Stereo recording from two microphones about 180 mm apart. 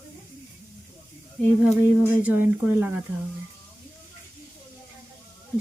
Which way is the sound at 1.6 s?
10° right (ahead or behind).